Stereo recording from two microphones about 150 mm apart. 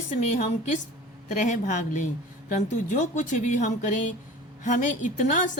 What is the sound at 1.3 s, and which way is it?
A woman's voice, 60° left (ahead or behind).